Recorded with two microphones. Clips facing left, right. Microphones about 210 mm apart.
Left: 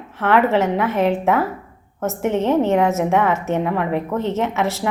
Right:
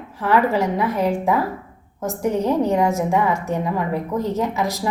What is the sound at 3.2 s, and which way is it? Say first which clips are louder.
A woman's voice: left 2 dB; 75° left (ahead or behind).